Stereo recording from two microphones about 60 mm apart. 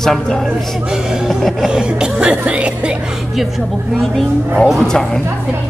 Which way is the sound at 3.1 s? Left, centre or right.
Centre.